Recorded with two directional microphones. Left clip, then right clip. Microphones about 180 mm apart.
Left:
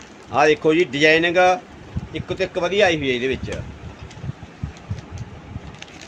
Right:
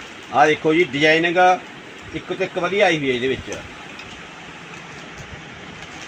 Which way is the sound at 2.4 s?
5° left (ahead or behind).